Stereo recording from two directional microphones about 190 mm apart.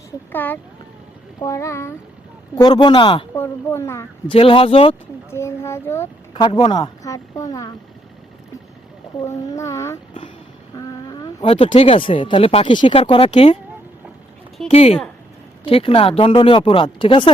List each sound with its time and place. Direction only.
0.3 s speech: 10° left (ahead or behind); by 3.2 s 25° left (ahead or behind)
3.3 s speech: 15° left (ahead or behind)
4.3 s speech: 30° left (ahead or behind)
5.3 s speech: 15° left (ahead or behind)
6.3 s speech: 25° left (ahead or behind)
9.2 s speech: 15° left (ahead or behind)
14.7 s speech: 30° left (ahead or behind)